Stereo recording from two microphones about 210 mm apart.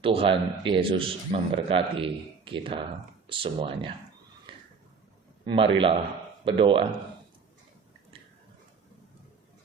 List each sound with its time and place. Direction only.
0.0 s speech: 25° right (ahead or behind)
4.5 s a sound: 25° right (ahead or behind)
5.5 s speech: 25° right (ahead or behind)